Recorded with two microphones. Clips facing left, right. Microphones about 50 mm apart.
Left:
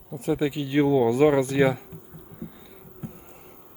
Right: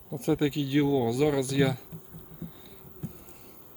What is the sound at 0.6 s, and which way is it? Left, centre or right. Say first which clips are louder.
Speech: left 8 dB; left.